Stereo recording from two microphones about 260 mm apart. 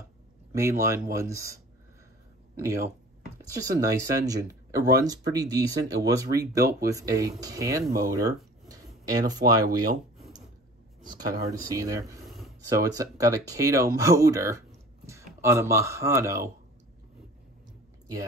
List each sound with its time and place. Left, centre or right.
0.6 s speech: centre
3.8 s speech: centre
11.2 s speech: centre
12.3 s a sound: centre
12.6 s speech: centre